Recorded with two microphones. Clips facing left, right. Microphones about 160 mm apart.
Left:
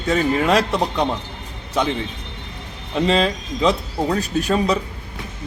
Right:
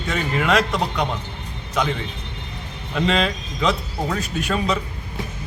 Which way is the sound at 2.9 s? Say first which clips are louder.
Left 3 dB; 35° left (ahead or behind).